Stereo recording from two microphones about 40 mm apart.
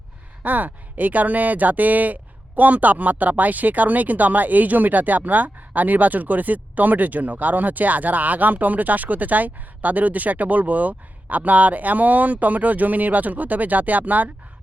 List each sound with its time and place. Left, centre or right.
0.4 s speech: right